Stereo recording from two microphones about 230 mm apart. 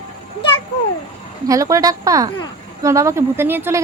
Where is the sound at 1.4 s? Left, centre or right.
Centre.